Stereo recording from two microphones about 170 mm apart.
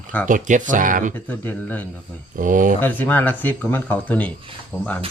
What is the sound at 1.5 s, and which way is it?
Speech, 10° left (ahead or behind).